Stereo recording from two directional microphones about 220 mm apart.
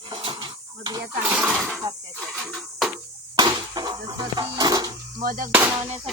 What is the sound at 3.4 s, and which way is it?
Speech, 20° right (ahead or behind).